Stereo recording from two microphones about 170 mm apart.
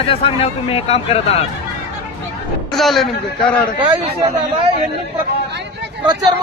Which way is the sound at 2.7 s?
Centre (ahead or behind).